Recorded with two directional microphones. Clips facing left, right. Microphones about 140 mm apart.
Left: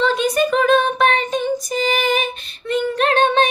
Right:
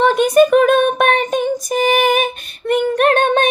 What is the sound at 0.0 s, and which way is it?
Child singing, 50° right (ahead or behind).